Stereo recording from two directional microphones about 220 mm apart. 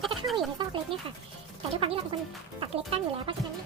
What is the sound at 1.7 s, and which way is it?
Speech, 25° right (ahead or behind).